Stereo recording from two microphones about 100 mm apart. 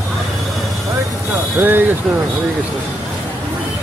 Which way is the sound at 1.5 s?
20° right (ahead or behind).